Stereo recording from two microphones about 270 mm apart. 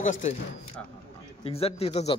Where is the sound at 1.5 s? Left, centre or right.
Left.